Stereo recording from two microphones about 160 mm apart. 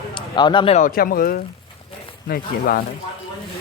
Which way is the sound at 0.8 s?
65° left (ahead or behind).